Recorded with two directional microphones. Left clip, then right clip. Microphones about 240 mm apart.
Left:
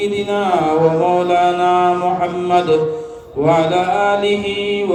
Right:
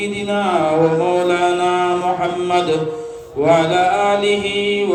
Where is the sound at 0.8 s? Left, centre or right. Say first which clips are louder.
Left 1 dB; centre.